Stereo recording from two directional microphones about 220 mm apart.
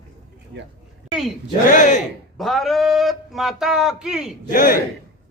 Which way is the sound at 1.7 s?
35° left (ahead or behind).